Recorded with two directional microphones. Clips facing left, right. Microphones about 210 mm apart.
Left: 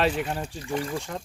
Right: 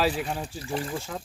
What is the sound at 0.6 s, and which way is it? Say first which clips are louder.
Speech: left 2 dB; 35° right (ahead or behind).